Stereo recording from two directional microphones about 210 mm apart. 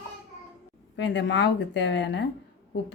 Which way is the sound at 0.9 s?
55° left (ahead or behind).